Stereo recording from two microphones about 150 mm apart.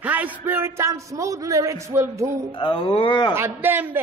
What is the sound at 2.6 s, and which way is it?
Speech, 35° left (ahead or behind).